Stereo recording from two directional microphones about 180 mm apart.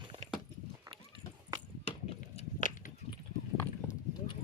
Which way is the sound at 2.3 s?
45° left (ahead or behind).